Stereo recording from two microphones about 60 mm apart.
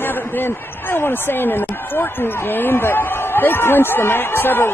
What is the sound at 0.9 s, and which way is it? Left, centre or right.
Speech, left.